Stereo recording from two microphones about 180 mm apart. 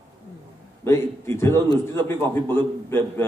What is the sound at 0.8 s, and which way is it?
A man's voice, 15° left (ahead or behind).